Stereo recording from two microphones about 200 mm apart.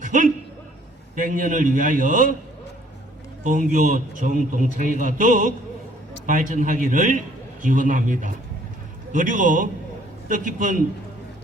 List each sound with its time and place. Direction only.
0.0 s a sound: 40° right (ahead or behind)
1.1 s a man's voice: 40° right (ahead or behind)
3.4 s a man's voice: 40° right (ahead or behind)